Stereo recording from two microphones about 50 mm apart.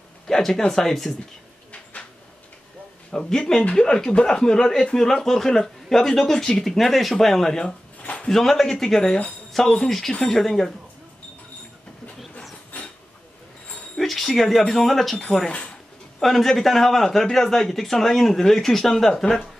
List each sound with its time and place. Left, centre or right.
0.3 s speech: centre
3.1 s speech: centre
8.0 s a sound: left
8.3 s speech: centre
13.9 s jingle bell: centre
14.6 s speech: centre